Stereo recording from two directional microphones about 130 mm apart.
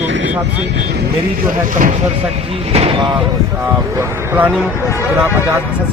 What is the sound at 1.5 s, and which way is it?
Speech, 90° right.